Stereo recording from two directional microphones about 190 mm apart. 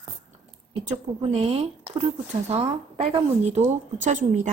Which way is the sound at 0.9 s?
35° right (ahead or behind).